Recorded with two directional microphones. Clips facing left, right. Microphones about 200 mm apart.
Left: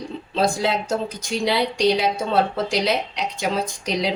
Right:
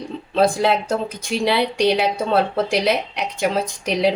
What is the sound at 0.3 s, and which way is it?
A woman's voice, 55° right (ahead or behind).